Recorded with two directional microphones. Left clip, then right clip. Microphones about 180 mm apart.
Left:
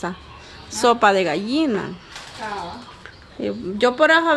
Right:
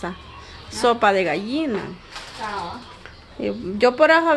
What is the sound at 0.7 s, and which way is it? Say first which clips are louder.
A woman's voice: left 2 dB; 10° left (ahead or behind).